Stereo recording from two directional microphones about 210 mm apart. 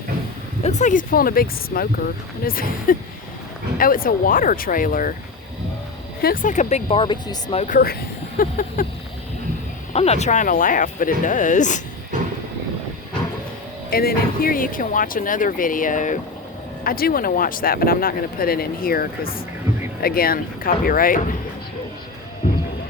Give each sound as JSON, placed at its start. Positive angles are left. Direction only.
{"t": 0.6, "sound": "speech", "side_deg": 35}
{"t": 6.2, "sound": "speech", "side_deg": 40}
{"t": 6.8, "sound": "speech", "side_deg": 20}
{"t": 7.6, "sound": "speech", "side_deg": 40}
{"t": 9.9, "sound": "speech", "side_deg": 30}
{"t": 13.9, "sound": "speech", "side_deg": 45}